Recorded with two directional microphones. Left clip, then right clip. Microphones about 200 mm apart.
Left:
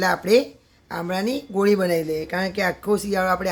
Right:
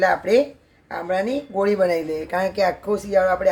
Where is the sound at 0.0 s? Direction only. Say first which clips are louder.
Right 1 dB; 55° left (ahead or behind).